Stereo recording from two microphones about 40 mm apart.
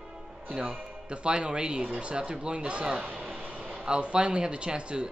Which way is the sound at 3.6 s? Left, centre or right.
Centre.